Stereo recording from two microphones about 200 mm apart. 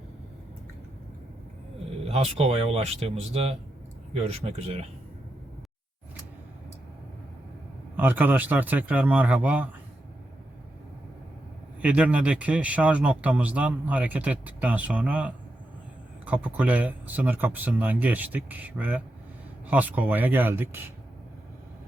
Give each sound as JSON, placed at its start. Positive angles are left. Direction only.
{"t": 2.0, "sound": "speech", "side_deg": -30}
{"t": 7.9, "sound": "speech", "side_deg": -10}
{"t": 11.8, "sound": "speech", "side_deg": -5}